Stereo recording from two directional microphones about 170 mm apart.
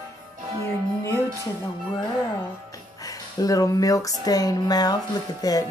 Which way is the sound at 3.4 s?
20° left (ahead or behind).